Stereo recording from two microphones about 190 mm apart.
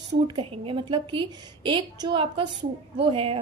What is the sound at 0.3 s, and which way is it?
A woman's voice, 30° right (ahead or behind).